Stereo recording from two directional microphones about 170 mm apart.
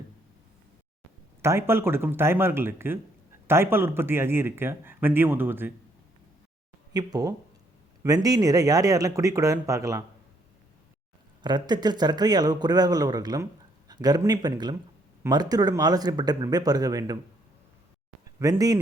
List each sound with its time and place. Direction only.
1.4 s speech: 15° right (ahead or behind)
6.9 s speech: 20° right (ahead or behind)
11.4 s speech: 25° right (ahead or behind)
18.3 s speech: 20° right (ahead or behind)